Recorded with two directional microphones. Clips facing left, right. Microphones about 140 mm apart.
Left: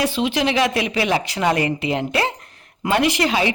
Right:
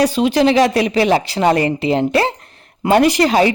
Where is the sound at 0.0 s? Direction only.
40° right (ahead or behind).